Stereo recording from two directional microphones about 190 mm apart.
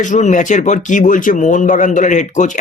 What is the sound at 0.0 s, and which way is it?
Speech, 40° left (ahead or behind).